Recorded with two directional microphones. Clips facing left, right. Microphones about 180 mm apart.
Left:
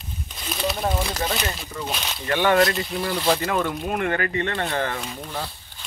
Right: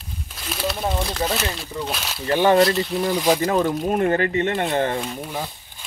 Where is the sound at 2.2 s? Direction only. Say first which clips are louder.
Right 3 dB; 30° right (ahead or behind).